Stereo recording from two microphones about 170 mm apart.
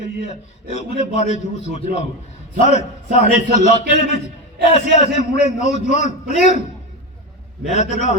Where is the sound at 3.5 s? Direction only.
40° left (ahead or behind).